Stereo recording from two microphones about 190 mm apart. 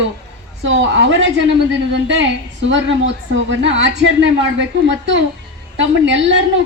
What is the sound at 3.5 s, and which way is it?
Speech, 75° right (ahead or behind).